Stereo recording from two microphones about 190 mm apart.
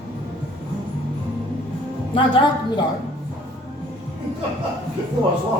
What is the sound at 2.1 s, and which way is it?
Speech, 25° left (ahead or behind).